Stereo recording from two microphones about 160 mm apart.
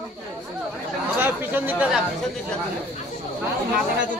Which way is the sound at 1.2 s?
10° right (ahead or behind).